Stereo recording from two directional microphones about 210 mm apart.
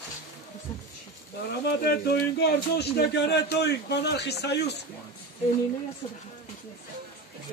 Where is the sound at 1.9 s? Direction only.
50° left (ahead or behind).